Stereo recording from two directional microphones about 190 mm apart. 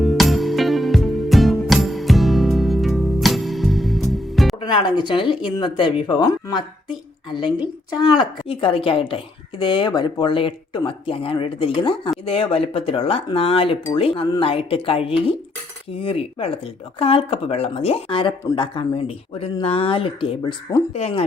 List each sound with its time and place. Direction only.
0.0 s music: centre (ahead or behind)
4.6 s a woman's voice: 25° left (ahead or behind)